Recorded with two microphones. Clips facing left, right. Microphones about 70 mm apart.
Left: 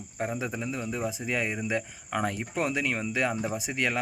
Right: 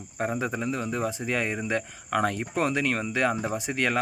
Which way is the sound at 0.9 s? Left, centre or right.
Right.